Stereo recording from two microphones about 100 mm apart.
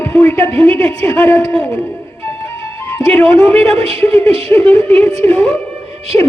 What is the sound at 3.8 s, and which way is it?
Speech, 70° right (ahead or behind).